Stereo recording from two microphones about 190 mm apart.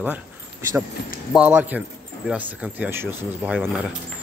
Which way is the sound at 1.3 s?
10° right (ahead or behind).